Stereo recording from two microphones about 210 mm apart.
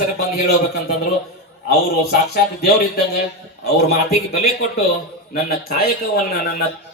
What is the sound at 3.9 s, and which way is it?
A man's voice, 45° left (ahead or behind).